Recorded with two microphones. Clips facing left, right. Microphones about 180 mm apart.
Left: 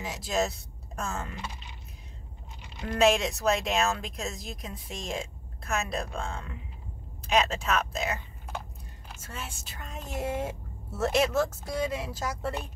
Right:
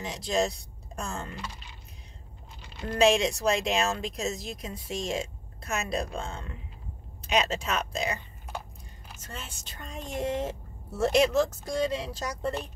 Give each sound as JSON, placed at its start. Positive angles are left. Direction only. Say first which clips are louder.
{"t": 0.0, "sound": "speech", "louder": "right 1 dB", "side_deg": 5}
{"t": 1.3, "sound": "speech", "louder": "even", "side_deg": 20}
{"t": 3.0, "sound": "speech", "louder": "right 1 dB", "side_deg": 0}
{"t": 9.7, "sound": "speech", "louder": "right 1 dB", "side_deg": 5}